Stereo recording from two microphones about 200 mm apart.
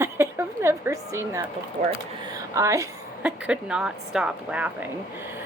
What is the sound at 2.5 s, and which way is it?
A woman's voice, 15° right (ahead or behind).